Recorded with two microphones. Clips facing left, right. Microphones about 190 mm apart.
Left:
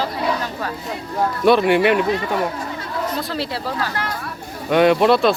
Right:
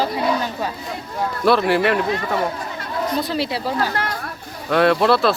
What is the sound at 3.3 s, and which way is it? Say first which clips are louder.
Speech: right 2 dB; 20° right (ahead or behind).